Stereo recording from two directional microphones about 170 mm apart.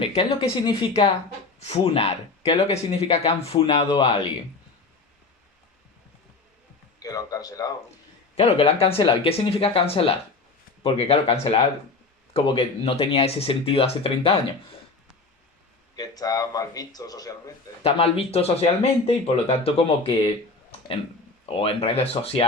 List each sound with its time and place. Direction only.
0.0 s speech: 30° left (ahead or behind)
7.0 s a man's voice: 20° left (ahead or behind)
8.4 s speech: 35° left (ahead or behind)
16.0 s a man's voice: 20° left (ahead or behind)
17.8 s speech: 35° left (ahead or behind)
21.4 s speech: 35° left (ahead or behind)